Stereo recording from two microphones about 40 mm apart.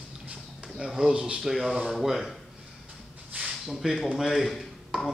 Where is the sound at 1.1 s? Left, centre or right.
Right.